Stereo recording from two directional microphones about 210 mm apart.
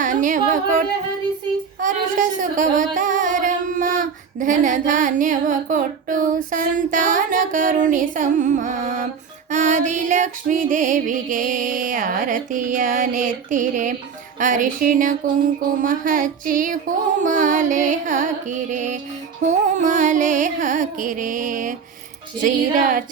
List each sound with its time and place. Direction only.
0.0 s music: 40° right (ahead or behind)
1.8 s singing: 40° right (ahead or behind)